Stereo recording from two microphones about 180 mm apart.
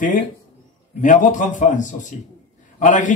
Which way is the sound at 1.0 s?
45° left (ahead or behind).